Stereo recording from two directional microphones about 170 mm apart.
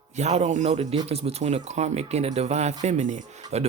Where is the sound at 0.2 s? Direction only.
40° right (ahead or behind).